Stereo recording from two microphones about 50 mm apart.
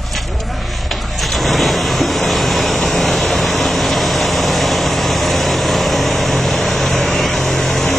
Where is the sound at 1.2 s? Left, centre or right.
Centre.